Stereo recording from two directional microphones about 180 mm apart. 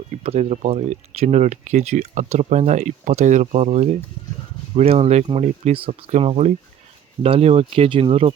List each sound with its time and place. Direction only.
0.2 s speech: 35° right (ahead or behind)